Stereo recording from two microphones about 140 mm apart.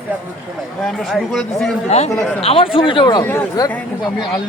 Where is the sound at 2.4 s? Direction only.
45° left (ahead or behind).